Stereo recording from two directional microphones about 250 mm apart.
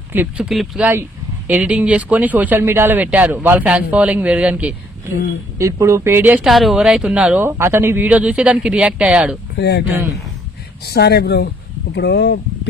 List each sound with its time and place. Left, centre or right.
0.1 s speech: centre
9.6 s speech: left
10.9 s speech: left